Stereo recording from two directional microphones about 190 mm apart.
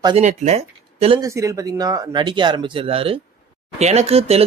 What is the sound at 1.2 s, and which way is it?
Speech, 15° right (ahead or behind).